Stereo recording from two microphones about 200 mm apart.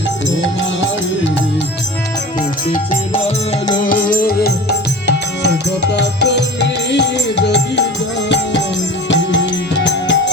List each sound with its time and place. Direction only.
2.6 s music: 40° left (ahead or behind)
3.1 s music: 30° left (ahead or behind)
3.8 s music: 45° left (ahead or behind)
5.9 s music: 60° left (ahead or behind)
9.0 s music: 65° left (ahead or behind)